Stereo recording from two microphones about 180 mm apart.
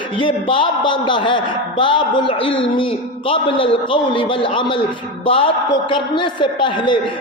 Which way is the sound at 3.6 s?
30° left (ahead or behind).